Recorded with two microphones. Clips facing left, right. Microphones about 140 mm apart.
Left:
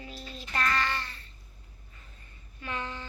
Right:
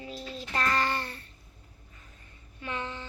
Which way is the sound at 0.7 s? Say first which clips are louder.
Right 2 dB; 45° right (ahead or behind).